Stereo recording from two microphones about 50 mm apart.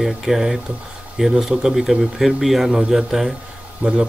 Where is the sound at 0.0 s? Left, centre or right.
Centre.